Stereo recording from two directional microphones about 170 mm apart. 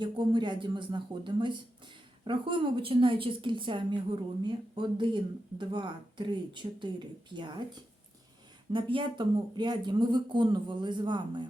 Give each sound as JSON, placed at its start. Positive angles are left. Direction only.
{"t": 0.0, "sound": "a woman's voice", "side_deg": -25}
{"t": 8.7, "sound": "a woman's voice", "side_deg": -30}